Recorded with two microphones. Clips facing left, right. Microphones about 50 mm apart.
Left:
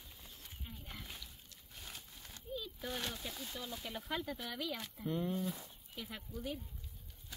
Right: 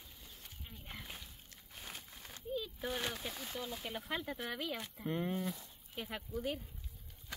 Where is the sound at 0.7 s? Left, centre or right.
Centre.